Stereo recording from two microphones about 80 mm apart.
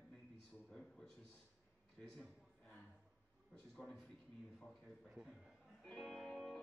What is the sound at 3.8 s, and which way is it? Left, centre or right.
Speech, centre.